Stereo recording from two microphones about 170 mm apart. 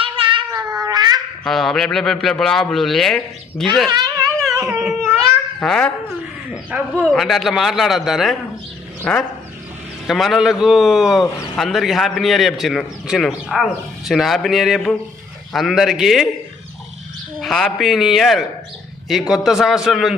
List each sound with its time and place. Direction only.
0.0 s cat: 30° right (ahead or behind)
1.5 s a man's voice: centre (ahead or behind)
3.8 s a sound: 25° right (ahead or behind)
4.7 s babbling: 5° right (ahead or behind)
5.5 s a child's voice: 5° left (ahead or behind)
6.5 s speech: 10° right (ahead or behind)
6.9 s a man's voice: 5° left (ahead or behind)
17.4 s a man's voice: centre (ahead or behind)